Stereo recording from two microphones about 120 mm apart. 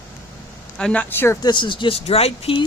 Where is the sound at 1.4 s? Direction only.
40° left (ahead or behind).